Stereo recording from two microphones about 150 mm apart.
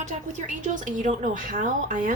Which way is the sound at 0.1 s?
55° right (ahead or behind).